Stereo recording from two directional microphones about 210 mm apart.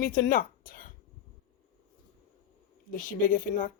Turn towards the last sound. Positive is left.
turn(degrees=40)  # may be behind; listen again after turning